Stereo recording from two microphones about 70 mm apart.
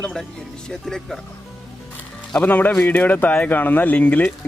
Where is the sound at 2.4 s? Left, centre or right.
Left.